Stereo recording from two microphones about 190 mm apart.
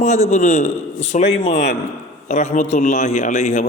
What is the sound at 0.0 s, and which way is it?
A man's voice, 40° left (ahead or behind).